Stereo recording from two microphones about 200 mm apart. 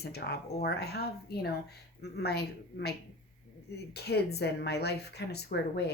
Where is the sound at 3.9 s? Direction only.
55° left (ahead or behind).